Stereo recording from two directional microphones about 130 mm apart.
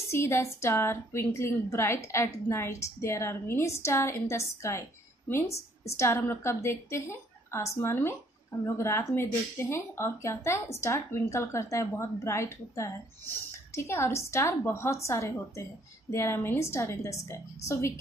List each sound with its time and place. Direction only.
0.1 s a woman's voice: 20° left (ahead or behind)